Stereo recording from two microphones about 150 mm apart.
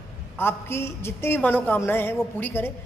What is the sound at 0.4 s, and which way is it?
A woman's voice, 15° left (ahead or behind).